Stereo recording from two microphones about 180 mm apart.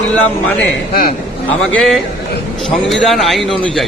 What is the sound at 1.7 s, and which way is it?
A man's voice, centre (ahead or behind).